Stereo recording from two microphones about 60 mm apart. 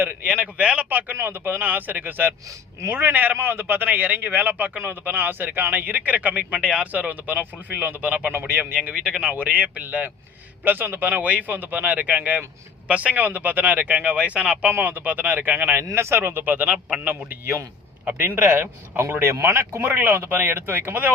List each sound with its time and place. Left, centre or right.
0.0 s speech: right
1.1 s speech: right; by 6.8 s centre
6.9 s speech: right
8.3 s speech: right
9.0 s speech: centre
9.3 s speech: right
14.2 s speech: centre
14.7 s speech: right
15.8 s speech: right